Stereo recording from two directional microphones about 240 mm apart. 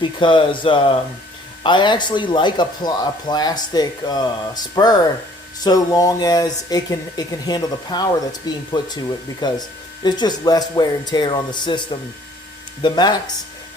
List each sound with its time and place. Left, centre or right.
0.0 s speech: centre